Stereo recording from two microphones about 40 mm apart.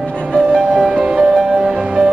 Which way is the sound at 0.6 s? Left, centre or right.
Centre.